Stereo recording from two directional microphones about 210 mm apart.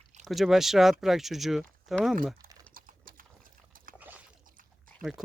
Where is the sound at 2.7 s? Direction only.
40° right (ahead or behind).